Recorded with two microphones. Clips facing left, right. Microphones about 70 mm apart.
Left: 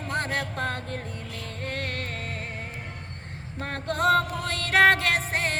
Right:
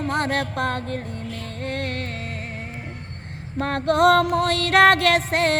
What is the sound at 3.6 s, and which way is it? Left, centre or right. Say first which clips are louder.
Music: right 9 dB; right.